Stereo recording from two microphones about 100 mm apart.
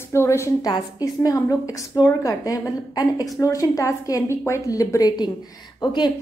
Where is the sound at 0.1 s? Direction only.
25° left (ahead or behind).